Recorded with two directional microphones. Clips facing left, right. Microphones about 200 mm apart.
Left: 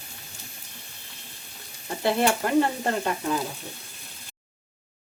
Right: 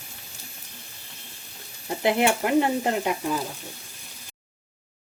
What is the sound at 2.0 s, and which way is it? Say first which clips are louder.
Stir: right 1 dB; 15° right (ahead or behind).